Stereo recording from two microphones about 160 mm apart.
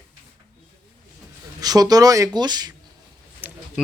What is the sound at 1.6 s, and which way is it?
Speech, 25° right (ahead or behind).